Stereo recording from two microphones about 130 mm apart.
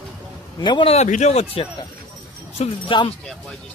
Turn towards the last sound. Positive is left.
turn(degrees=40)  # may be behind; listen again after turning